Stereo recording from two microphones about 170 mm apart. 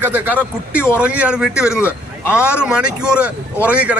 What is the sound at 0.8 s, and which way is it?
Speech, 15° left (ahead or behind).